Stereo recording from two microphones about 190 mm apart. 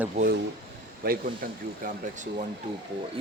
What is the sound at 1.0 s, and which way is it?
Speech, 50° right (ahead or behind).